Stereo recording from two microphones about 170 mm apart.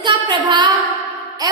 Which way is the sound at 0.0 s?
25° right (ahead or behind).